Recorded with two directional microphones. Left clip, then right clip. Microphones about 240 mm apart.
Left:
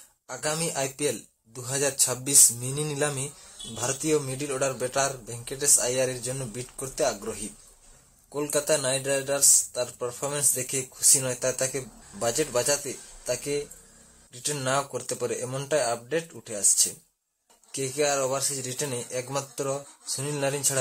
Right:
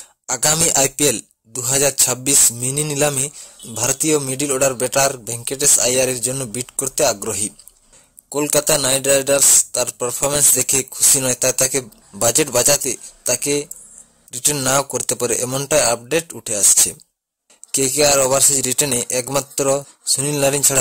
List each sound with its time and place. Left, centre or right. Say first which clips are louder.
0.3 s speech: right 12 dB; right